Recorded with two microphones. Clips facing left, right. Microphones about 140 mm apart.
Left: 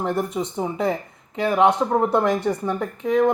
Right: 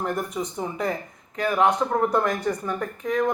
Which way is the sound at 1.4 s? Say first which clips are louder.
Left 3 dB; 25° left (ahead or behind).